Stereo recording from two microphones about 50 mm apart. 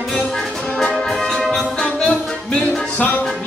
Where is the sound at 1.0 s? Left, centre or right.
Centre.